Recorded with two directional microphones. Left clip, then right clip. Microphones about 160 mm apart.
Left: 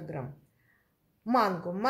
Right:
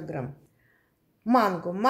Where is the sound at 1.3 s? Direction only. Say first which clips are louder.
Right 4 dB; 15° right (ahead or behind).